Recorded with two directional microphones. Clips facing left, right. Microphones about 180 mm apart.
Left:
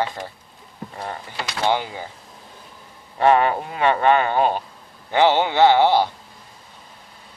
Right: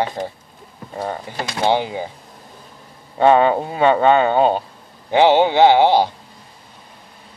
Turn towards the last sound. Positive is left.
turn(degrees=-15)  # may be behind; listen again after turning